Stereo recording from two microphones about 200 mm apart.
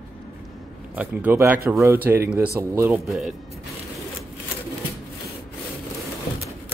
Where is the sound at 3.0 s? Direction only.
Centre (ahead or behind).